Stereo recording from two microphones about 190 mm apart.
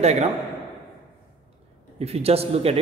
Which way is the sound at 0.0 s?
35° right (ahead or behind).